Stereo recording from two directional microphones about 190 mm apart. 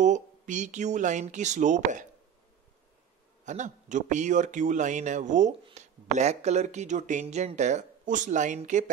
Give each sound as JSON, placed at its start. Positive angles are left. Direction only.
{"t": 0.0, "sound": "speech", "side_deg": -40}
{"t": 3.4, "sound": "speech", "side_deg": -40}